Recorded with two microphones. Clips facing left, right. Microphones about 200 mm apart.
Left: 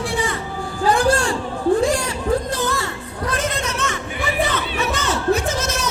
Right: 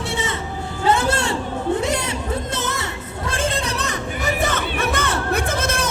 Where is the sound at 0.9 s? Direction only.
25° right (ahead or behind).